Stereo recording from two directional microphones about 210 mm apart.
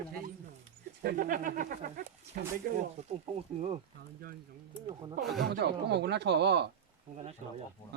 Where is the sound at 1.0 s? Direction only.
45° right (ahead or behind).